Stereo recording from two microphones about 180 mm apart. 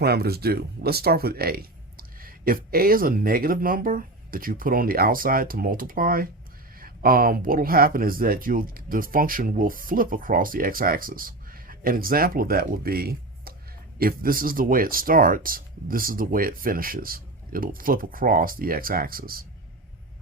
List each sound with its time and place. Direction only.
0.0 s speech: 60° right (ahead or behind)